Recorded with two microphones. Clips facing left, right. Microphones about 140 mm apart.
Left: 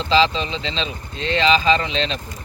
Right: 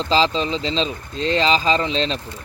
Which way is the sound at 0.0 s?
40° right (ahead or behind).